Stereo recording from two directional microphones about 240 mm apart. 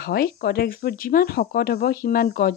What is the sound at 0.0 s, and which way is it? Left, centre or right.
Speech, left.